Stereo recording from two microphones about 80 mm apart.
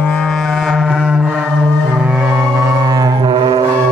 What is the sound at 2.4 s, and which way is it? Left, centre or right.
Music, right.